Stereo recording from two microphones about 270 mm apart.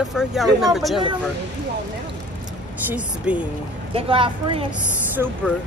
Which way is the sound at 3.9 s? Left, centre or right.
Centre.